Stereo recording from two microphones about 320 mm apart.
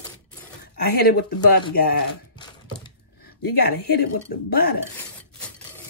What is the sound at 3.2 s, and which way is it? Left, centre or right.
Speech, left.